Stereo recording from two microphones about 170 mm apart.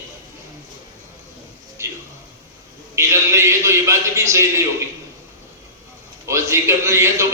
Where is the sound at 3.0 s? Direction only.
15° right (ahead or behind).